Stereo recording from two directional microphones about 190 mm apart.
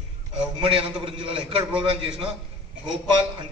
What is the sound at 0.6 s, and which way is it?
A man's voice, 30° right (ahead or behind).